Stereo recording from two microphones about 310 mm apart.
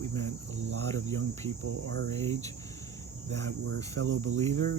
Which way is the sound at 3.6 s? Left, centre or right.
Right.